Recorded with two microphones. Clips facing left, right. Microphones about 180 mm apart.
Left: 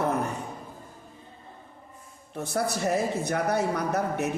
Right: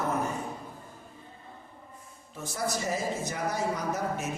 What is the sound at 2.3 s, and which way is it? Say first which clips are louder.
A woman's voice: left 4 dB; 65° left (ahead or behind).